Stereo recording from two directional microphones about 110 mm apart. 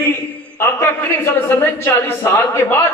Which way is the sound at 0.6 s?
20° left (ahead or behind).